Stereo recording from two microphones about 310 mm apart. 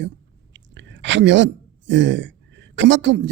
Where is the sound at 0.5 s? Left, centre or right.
Right.